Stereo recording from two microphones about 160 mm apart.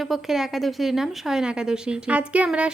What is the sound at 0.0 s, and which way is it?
A woman's voice, centre (ahead or behind).